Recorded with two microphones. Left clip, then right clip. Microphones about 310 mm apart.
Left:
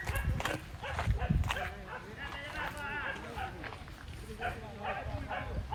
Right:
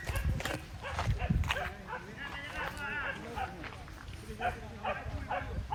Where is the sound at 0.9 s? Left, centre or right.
Centre.